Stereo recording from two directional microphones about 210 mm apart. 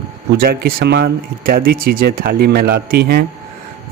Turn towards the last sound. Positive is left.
turn(degrees=-50)  # may be behind; listen again after turning